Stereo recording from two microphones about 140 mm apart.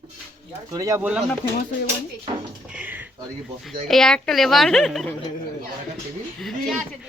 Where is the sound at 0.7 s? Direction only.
25° right (ahead or behind).